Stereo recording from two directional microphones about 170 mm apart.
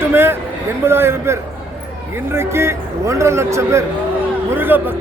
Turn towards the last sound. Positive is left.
turn(degrees=-10)  # may be behind; listen again after turning